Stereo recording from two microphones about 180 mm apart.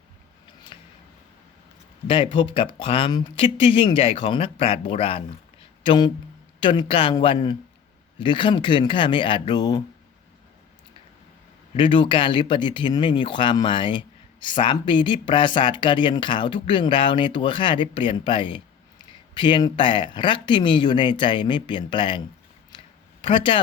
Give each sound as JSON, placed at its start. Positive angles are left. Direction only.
{"t": 0.7, "sound": "a sound", "side_deg": 30}
{"t": 2.0, "sound": "speech", "side_deg": 30}
{"t": 11.8, "sound": "speech", "side_deg": 25}
{"t": 23.2, "sound": "speech", "side_deg": 30}